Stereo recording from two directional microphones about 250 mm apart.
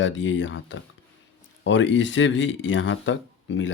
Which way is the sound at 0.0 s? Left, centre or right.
Left.